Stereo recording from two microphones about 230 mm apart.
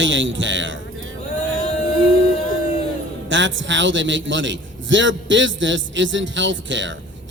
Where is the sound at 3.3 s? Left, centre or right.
Right.